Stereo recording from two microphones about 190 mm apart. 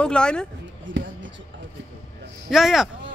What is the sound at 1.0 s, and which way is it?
Basketball bounce, 75° right (ahead or behind).